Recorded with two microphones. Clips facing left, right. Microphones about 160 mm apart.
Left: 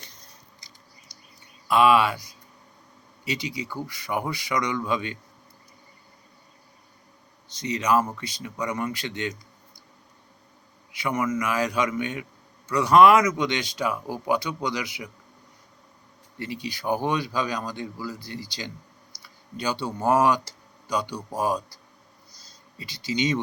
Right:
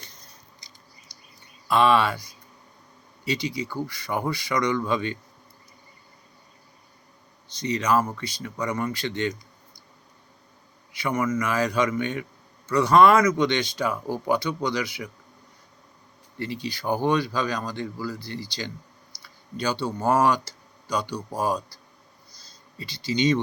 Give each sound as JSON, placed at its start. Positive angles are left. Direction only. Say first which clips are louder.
{"t": 1.1, "sound": "a sound", "louder": "even", "side_deg": 45}
{"t": 1.6, "sound": "speech", "louder": "left 1 dB", "side_deg": 10}
{"t": 3.2, "sound": "speech", "louder": "right 3 dB", "side_deg": 15}
{"t": 7.6, "sound": "speech", "louder": "even", "side_deg": 20}
{"t": 10.9, "sound": "speech", "louder": "right 1 dB", "side_deg": 15}
{"t": 16.4, "sound": "speech", "louder": "right 1 dB", "side_deg": 15}
{"t": 19.5, "sound": "speech", "louder": "right 2 dB", "side_deg": 15}
{"t": 22.8, "sound": "speech", "louder": "right 2 dB", "side_deg": 15}